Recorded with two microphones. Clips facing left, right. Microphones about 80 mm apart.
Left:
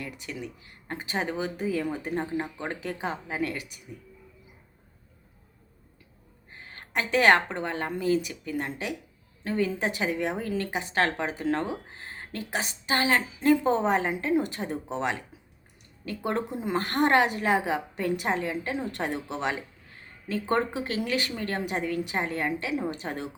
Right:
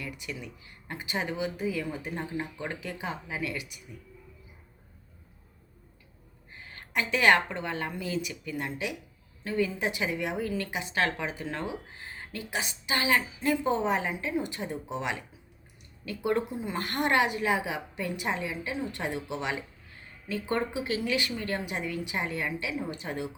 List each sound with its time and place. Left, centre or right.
0.0 s a woman's voice: left
6.5 s a sound: left
7.5 s a woman's voice: left